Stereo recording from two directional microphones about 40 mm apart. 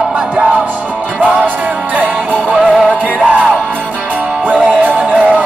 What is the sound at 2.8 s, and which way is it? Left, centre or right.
Music, right.